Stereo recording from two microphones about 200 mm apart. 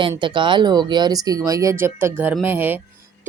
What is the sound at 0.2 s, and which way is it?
A woman's voice, 25° right (ahead or behind).